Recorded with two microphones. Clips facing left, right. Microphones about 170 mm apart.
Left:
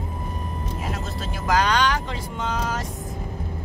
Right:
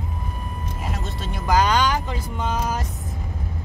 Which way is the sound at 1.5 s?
5° right (ahead or behind).